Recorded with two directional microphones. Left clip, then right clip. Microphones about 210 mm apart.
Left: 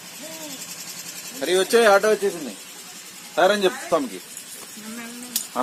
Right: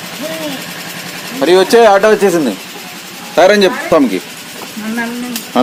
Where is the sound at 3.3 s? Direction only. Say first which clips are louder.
Right 11 dB; 20° right (ahead or behind).